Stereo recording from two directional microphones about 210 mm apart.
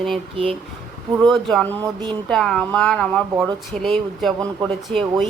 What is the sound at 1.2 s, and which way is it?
Speech, centre (ahead or behind).